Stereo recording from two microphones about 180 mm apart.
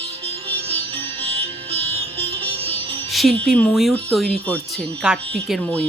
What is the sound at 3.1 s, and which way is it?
Music, centre (ahead or behind).